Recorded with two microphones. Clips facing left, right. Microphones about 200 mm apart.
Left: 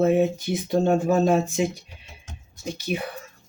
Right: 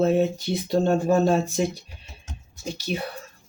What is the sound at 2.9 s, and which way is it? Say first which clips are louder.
Speech: left 1 dB; 15° left (ahead or behind).